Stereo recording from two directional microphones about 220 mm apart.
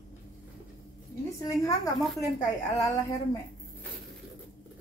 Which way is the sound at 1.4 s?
15° left (ahead or behind).